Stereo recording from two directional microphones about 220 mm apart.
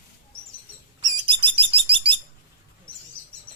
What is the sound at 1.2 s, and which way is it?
Bird, 25° right (ahead or behind).